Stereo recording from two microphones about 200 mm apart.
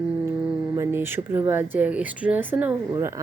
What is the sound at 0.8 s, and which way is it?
Speech, 10° right (ahead or behind).